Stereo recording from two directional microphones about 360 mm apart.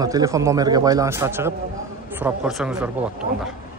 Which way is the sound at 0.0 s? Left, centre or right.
Centre.